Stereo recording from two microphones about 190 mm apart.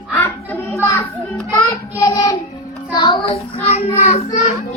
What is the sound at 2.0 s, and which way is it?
Child singing, 20° left (ahead or behind).